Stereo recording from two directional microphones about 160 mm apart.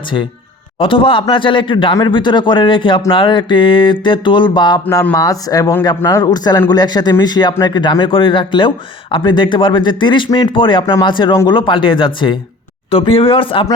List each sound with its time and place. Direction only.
0.8 s a man's voice: 35° left (ahead or behind)